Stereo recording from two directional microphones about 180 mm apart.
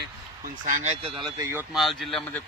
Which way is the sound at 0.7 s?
45° right (ahead or behind).